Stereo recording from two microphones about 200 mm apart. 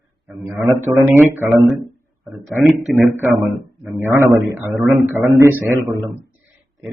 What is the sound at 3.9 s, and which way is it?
A man's voice, 15° right (ahead or behind).